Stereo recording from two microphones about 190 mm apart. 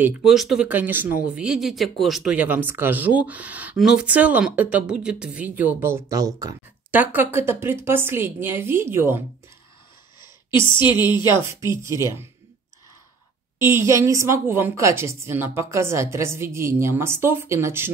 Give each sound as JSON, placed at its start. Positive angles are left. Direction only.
{"t": 0.0, "sound": "speech", "side_deg": -5}
{"t": 10.7, "sound": "speech", "side_deg": 25}
{"t": 13.6, "sound": "speech", "side_deg": -15}